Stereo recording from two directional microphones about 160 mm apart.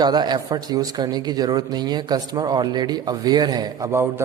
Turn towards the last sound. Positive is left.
turn(degrees=-15)  # may be behind; listen again after turning